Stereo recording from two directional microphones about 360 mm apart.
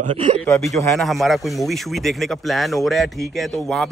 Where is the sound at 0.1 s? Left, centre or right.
Centre.